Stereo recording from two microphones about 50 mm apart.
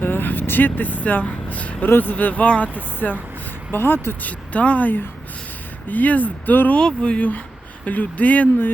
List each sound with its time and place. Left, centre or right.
0.0 s vehicle: left
1.9 s speech: left
4.3 s speech: left
6.7 s speech: left